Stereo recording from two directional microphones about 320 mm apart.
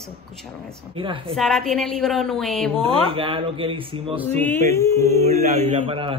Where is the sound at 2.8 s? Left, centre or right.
Centre.